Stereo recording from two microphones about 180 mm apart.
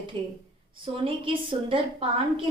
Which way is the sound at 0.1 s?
25° right (ahead or behind).